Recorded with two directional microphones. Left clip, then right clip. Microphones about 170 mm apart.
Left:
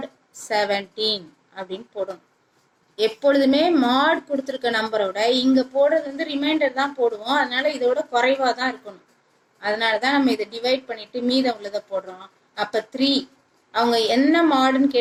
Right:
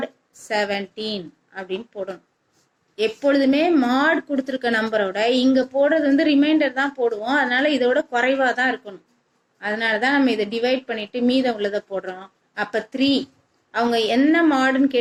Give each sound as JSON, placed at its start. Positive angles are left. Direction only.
{"t": 0.0, "sound": "a woman's voice", "side_deg": -45}